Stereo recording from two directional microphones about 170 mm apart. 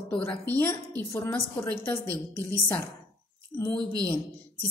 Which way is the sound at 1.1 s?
15° left (ahead or behind).